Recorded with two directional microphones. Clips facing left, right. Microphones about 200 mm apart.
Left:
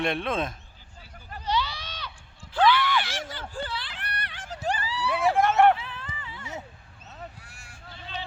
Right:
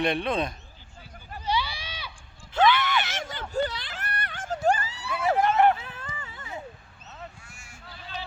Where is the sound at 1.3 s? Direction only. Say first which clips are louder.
Even; 10° right (ahead or behind).